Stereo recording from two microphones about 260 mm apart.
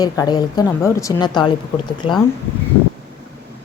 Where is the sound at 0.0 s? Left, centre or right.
Centre.